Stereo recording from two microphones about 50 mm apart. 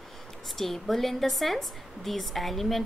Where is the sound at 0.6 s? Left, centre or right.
Centre.